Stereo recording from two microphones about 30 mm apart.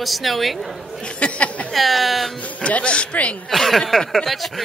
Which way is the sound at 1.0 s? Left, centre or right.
Left.